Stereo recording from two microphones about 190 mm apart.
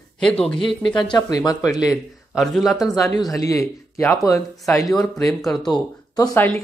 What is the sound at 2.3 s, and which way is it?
Speech, centre (ahead or behind).